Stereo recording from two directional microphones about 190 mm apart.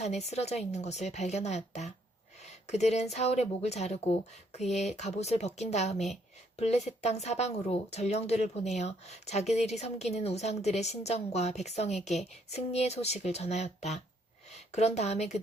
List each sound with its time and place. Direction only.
0.0 s speech: 35° left (ahead or behind)